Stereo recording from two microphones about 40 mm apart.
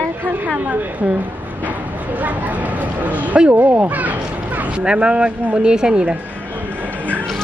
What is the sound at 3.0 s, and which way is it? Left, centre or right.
Speech, right.